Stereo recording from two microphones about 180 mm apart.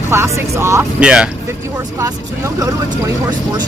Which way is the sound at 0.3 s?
15° right (ahead or behind).